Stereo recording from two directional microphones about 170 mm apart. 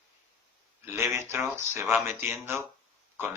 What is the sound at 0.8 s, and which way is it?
Speech, 15° right (ahead or behind).